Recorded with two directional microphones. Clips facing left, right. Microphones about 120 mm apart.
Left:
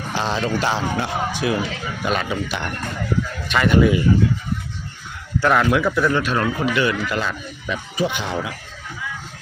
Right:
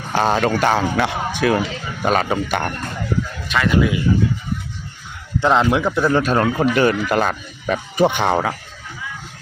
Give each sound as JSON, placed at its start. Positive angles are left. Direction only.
{"t": 0.1, "sound": "speech", "side_deg": -50}
{"t": 2.0, "sound": "speech", "side_deg": -45}
{"t": 3.5, "sound": "speech", "side_deg": 0}
{"t": 5.4, "sound": "a man's voice", "side_deg": -20}